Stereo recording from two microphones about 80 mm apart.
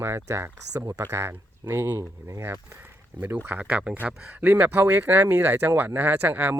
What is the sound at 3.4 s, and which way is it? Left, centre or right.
Speech, centre.